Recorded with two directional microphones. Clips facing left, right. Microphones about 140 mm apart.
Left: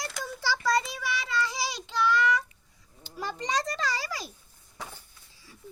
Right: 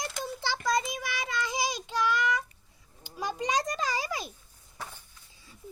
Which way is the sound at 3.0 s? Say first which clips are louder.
Right 2 dB; 15° right (ahead or behind).